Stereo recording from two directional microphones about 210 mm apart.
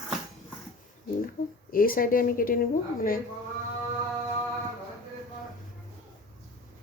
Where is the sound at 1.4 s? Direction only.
45° left (ahead or behind).